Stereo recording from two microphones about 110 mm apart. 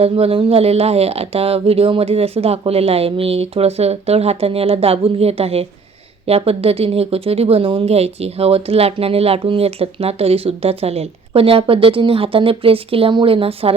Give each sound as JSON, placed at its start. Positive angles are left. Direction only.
{"t": 0.0, "sound": "speech", "side_deg": -60}